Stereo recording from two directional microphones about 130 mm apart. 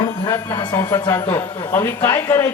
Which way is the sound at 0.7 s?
20° left (ahead or behind).